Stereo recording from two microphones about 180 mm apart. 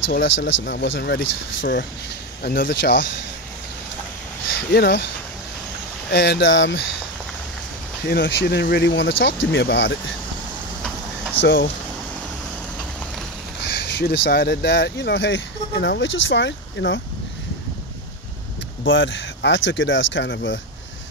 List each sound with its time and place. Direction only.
0.2 s speech: 75° left (ahead or behind)
4.7 s speech: 65° left (ahead or behind)
6.1 s speech: 70° left (ahead or behind); by 6.9 s 90° left
8.0 s speech: 60° left (ahead or behind); by 9.9 s 90° left
11.4 s speech: 65° left (ahead or behind)
13.6 s speech: 65° left (ahead or behind); by 17.0 s 85° left
18.9 s speech: 90° left